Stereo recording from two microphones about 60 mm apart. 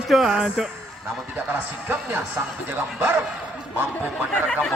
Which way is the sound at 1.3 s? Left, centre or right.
Right.